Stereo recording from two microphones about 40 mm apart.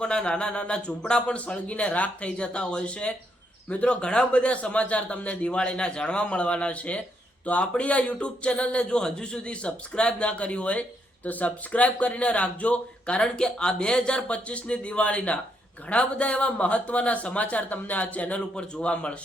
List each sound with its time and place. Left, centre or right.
0.0 s a man's voice: left